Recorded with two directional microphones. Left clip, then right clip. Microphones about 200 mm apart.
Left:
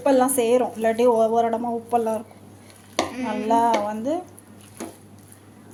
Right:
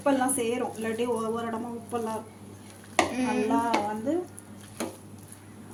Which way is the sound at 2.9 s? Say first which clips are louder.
Even; 15° right (ahead or behind).